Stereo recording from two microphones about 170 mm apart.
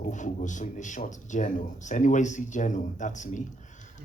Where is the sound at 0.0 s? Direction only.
45° left (ahead or behind).